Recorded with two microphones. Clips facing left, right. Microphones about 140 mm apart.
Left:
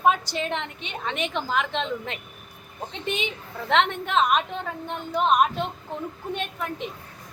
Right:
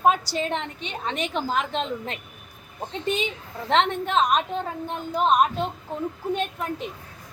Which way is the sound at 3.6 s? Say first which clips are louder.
Right 1 dB; 35° right (ahead or behind).